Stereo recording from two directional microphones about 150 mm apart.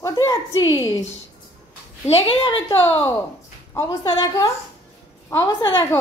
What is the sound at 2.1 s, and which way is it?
A woman's voice, 40° left (ahead or behind).